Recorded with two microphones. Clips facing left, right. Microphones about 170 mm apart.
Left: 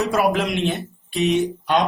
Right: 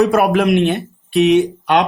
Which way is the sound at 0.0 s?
60° right (ahead or behind).